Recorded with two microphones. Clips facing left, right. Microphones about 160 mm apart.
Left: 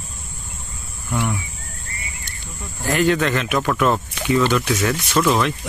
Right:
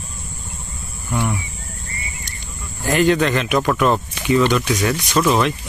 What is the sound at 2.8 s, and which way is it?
Speech, 15° right (ahead or behind).